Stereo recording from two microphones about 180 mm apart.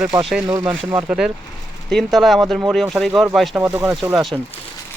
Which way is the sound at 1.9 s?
Centre (ahead or behind).